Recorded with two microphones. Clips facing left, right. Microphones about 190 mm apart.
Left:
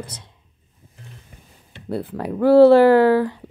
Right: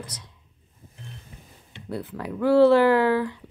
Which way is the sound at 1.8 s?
30° left (ahead or behind).